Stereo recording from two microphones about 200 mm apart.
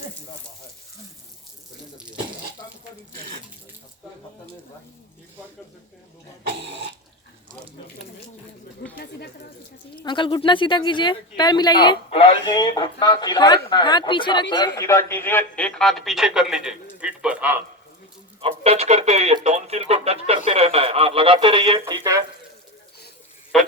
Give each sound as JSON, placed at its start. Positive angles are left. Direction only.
{"t": 6.5, "sound": "bathtub", "side_deg": -60}
{"t": 9.0, "sound": "a sound", "side_deg": 55}
{"t": 9.9, "sound": "a woman's voice", "side_deg": 25}
{"t": 18.3, "sound": "speech", "side_deg": -30}
{"t": 23.5, "sound": "a man's voice", "side_deg": 0}